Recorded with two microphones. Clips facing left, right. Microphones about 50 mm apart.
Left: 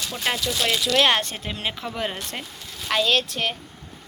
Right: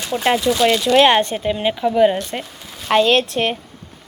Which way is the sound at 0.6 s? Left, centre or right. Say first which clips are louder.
Right 8 dB; centre.